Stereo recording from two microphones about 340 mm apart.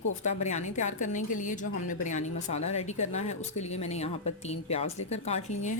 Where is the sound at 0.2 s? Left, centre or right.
Left.